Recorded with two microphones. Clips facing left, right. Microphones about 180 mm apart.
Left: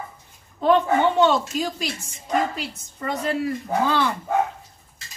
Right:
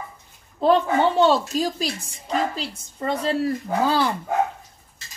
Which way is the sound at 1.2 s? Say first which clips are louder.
Right 1 dB; 35° right (ahead or behind).